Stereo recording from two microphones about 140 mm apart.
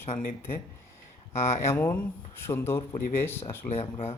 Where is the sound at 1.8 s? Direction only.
20° left (ahead or behind).